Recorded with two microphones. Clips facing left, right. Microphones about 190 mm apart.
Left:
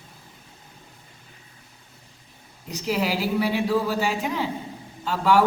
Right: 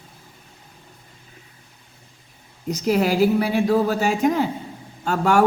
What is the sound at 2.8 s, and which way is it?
A man's voice, 45° right (ahead or behind).